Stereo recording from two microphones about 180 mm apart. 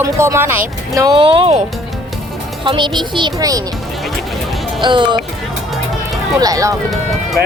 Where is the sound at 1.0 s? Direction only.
25° right (ahead or behind).